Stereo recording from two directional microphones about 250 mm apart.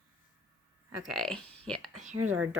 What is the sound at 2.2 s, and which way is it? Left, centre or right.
Speech, right.